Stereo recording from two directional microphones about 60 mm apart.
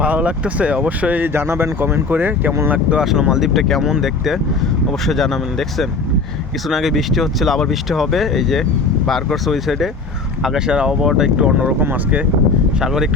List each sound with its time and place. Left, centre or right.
0.0 s speech: right
1.3 s speech: right
2.6 s speech: right
3.0 s speech: centre
5.0 s speech: centre
10.4 s speech: centre
12.8 s speech: centre